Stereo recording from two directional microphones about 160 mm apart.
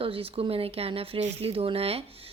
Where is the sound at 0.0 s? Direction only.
35° right (ahead or behind).